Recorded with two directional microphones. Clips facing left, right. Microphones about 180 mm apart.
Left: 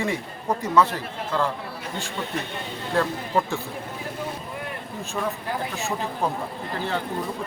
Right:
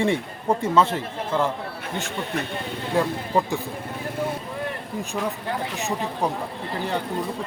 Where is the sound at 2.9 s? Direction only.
15° right (ahead or behind).